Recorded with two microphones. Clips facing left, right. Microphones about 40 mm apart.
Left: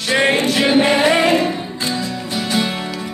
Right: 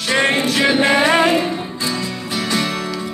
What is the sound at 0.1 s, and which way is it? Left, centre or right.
Music, centre.